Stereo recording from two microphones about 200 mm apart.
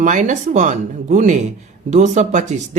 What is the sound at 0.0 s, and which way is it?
Speech, 40° right (ahead or behind).